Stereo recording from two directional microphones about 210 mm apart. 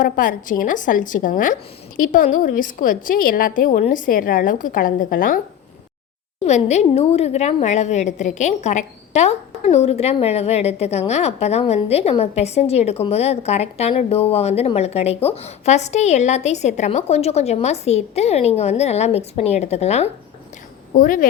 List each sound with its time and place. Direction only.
0.0 s a woman's voice: 40° left (ahead or behind)
6.4 s a woman's voice: 30° left (ahead or behind)